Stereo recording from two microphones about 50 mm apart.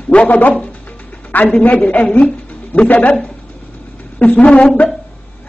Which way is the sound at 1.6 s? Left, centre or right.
Left.